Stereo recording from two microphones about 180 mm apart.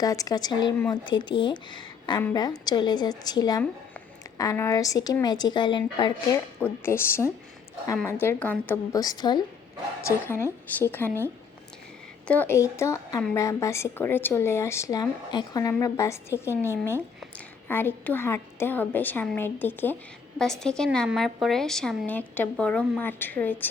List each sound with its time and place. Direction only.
0.0 s speech: 20° left (ahead or behind)
6.8 s a woman's voice: 15° left (ahead or behind)
10.2 s a woman's voice: 15° left (ahead or behind)
12.3 s a woman's voice: 10° left (ahead or behind)